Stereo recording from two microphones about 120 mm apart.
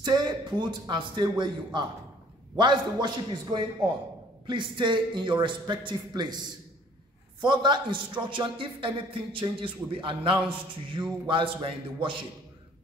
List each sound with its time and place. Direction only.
0.0 s a man's voice: 40° right (ahead or behind)